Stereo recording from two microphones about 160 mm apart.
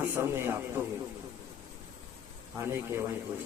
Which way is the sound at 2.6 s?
15° right (ahead or behind).